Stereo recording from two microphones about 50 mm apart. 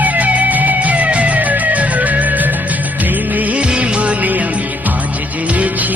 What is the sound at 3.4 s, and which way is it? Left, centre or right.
Music of bollywood, right.